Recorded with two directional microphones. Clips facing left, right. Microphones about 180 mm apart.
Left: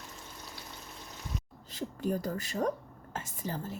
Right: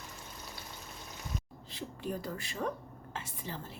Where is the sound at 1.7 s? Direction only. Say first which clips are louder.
Left 5 dB; 40° left (ahead or behind).